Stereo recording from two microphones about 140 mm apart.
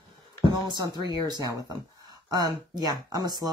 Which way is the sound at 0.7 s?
30° right (ahead or behind).